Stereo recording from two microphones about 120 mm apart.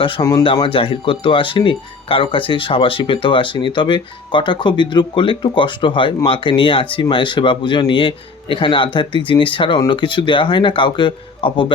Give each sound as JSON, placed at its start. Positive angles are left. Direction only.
{"t": 0.2, "sound": "speech", "side_deg": 30}
{"t": 0.4, "sound": "speech", "side_deg": 45}